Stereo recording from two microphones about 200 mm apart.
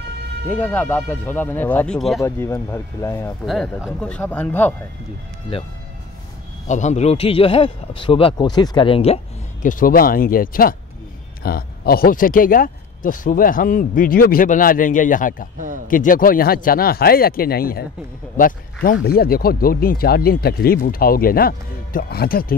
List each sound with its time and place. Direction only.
0.5 s speech: 10° left (ahead or behind)
2.2 s speech: 15° left (ahead or behind)
3.4 s speech: centre (ahead or behind)
6.7 s speech: 35° left (ahead or behind)